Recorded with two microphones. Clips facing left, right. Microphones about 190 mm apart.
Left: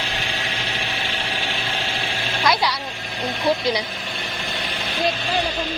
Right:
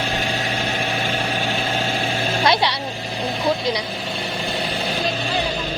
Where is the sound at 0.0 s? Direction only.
45° right (ahead or behind).